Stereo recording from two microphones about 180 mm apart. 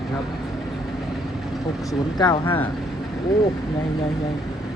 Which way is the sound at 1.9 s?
25° left (ahead or behind).